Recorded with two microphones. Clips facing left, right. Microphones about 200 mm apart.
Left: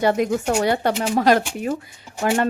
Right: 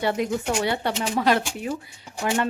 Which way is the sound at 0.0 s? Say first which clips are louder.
Left 5 dB; 45° left (ahead or behind).